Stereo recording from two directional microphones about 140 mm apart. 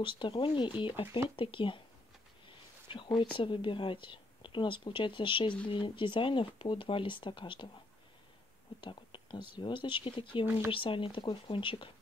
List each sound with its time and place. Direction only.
0.0 s speech: 35° left (ahead or behind)
2.4 s a sound: 35° left (ahead or behind)
3.3 s speech: 35° left (ahead or behind)
8.8 s whispering: 35° left (ahead or behind)
9.5 s speech: 35° left (ahead or behind)
10.4 s speech: 15° right (ahead or behind)
10.7 s speech: 40° left (ahead or behind)